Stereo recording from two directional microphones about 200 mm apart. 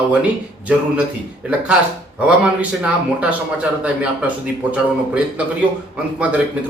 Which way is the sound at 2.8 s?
5° right (ahead or behind).